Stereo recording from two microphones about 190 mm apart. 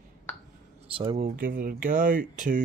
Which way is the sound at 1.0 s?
35° right (ahead or behind).